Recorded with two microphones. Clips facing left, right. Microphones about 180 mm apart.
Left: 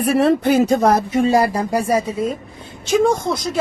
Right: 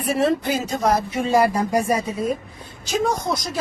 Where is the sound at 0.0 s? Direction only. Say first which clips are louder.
Left 5 dB; 60° left (ahead or behind); by 2.3 s 30° left (ahead or behind).